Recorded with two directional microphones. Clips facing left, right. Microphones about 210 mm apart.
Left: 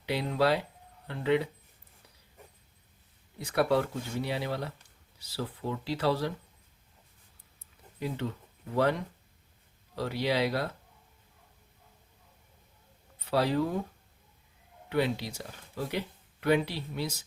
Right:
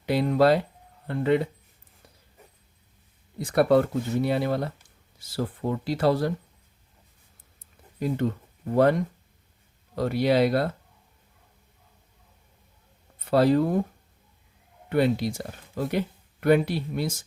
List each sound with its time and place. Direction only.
0.0 s speech: 50° right (ahead or behind)
3.4 s speech: 50° right (ahead or behind)
7.6 s a sound: 50° right (ahead or behind)
9.9 s speech: 50° right (ahead or behind)
13.1 s speech: 50° right (ahead or behind)
14.8 s speech: 50° right (ahead or behind)